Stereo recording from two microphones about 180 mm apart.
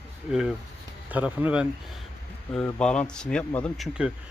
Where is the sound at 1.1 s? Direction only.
10° right (ahead or behind).